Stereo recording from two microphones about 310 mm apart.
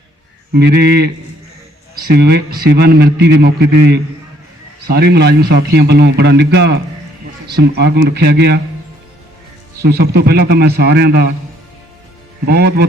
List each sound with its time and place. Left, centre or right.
0.5 s a man's voice: right
9.8 s a man's voice: right
12.5 s a man's voice: right